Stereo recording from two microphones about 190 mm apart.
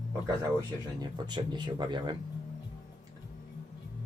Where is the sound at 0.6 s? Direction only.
20° right (ahead or behind).